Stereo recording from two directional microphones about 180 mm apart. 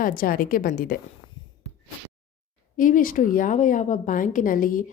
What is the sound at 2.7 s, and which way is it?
A woman's voice, 50° left (ahead or behind).